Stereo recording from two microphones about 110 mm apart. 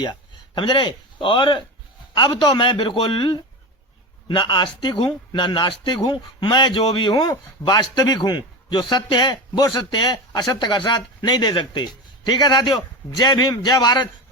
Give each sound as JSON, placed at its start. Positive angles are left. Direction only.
{"t": 0.0, "sound": "speech", "side_deg": 45}